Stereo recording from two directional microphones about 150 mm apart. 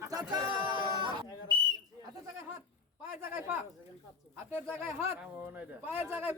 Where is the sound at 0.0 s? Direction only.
25° right (ahead or behind).